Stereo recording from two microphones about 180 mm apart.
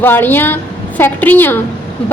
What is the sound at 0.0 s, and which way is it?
A woman's voice, 10° left (ahead or behind).